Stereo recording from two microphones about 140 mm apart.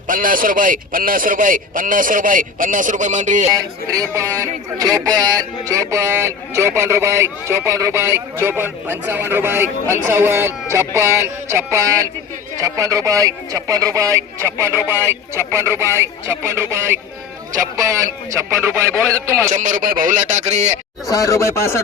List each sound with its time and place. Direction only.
0.1 s a man's voice: 80° right; by 3.5 s 60° right (ahead or behind)
3.5 s speech: 25° right (ahead or behind)
19.5 s speech: 65° right (ahead or behind)
21.1 s speech: 25° left (ahead or behind)